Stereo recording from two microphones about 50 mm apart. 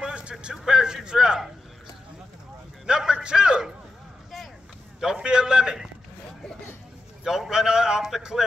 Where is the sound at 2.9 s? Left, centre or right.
Centre.